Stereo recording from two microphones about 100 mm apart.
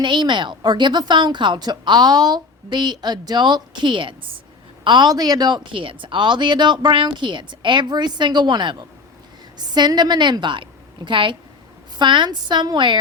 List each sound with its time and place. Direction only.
0.0 s a woman's voice: 50° right (ahead or behind)